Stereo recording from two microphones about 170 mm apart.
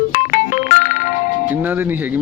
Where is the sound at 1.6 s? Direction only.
10° right (ahead or behind).